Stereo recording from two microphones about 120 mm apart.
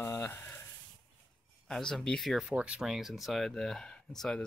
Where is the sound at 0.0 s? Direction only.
20° left (ahead or behind).